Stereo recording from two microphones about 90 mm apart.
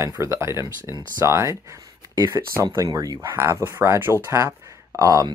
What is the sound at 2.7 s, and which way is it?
Speech, 40° right (ahead or behind).